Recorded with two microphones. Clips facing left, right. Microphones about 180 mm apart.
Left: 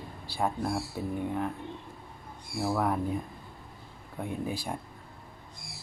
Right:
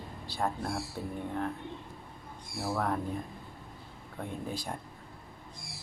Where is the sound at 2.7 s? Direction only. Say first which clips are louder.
Left 3 dB; 10° left (ahead or behind).